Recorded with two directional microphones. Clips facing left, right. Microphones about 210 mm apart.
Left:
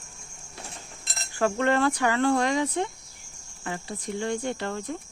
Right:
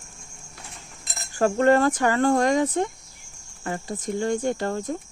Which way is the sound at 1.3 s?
40° right (ahead or behind).